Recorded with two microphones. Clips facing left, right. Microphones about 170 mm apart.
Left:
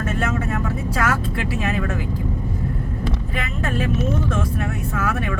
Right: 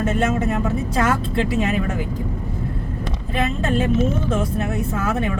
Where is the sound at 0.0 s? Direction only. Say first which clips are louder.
Right 4 dB; 25° right (ahead or behind).